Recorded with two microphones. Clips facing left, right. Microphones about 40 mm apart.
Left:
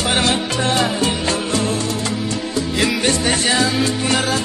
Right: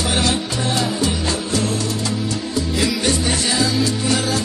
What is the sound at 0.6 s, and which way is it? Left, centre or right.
Music, left.